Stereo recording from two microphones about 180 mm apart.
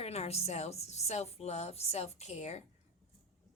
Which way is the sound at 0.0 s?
35° left (ahead or behind).